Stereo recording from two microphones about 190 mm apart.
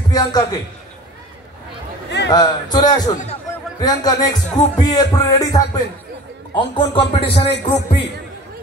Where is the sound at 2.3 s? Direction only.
20° left (ahead or behind).